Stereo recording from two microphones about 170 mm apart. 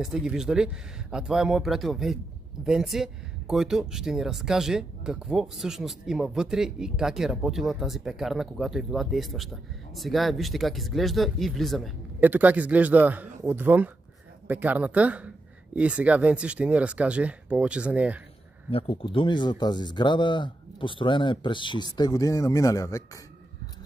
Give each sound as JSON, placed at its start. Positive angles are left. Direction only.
{"t": 0.0, "sound": "speech", "side_deg": -5}
{"t": 12.2, "sound": "speech", "side_deg": -10}
{"t": 18.7, "sound": "speech", "side_deg": 35}